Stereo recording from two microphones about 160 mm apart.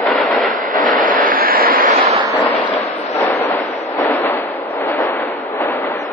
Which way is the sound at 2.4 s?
10° left (ahead or behind).